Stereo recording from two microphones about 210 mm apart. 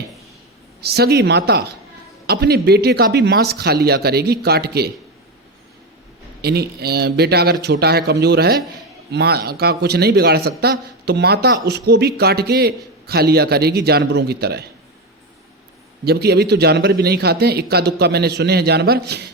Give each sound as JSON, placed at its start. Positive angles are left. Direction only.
{"t": 0.8, "sound": "a man's voice", "side_deg": -50}
{"t": 6.4, "sound": "a man's voice", "side_deg": -50}
{"t": 16.0, "sound": "a man's voice", "side_deg": -50}